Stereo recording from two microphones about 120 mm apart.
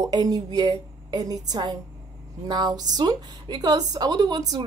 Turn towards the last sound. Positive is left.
turn(degrees=-30)  # may be behind; listen again after turning